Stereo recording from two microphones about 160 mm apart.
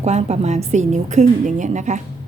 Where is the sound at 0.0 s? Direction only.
45° right (ahead or behind).